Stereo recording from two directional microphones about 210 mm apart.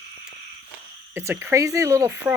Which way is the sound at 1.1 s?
10° right (ahead or behind).